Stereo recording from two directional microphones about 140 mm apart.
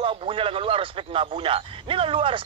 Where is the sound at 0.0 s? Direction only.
40° right (ahead or behind).